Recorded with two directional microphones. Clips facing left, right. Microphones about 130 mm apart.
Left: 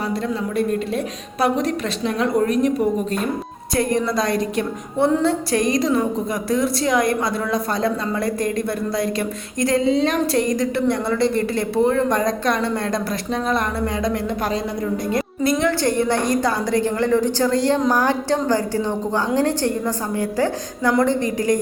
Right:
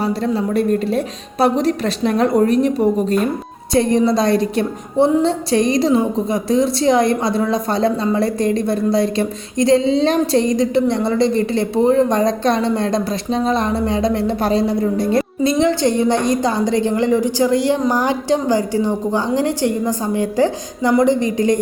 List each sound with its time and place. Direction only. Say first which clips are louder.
0.0 s a woman's voice: right 5 dB; 30° right (ahead or behind)